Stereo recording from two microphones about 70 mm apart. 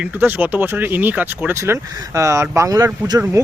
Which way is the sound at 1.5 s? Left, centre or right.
Right.